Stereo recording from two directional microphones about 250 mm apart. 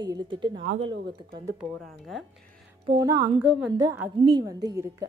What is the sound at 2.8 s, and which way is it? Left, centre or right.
A woman's voice, centre.